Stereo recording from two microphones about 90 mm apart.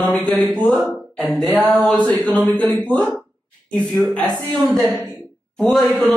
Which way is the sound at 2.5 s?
15° left (ahead or behind).